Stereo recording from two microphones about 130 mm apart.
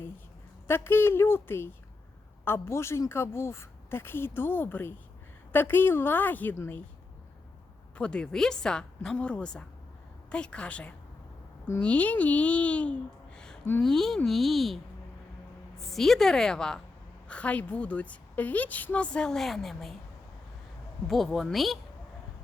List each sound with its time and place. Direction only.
0.7 s a woman's voice: 20° left (ahead or behind)
7.9 s a child's voice: 10° left (ahead or behind)
15.8 s a woman's voice: centre (ahead or behind)
21.1 s a woman's voice: centre (ahead or behind)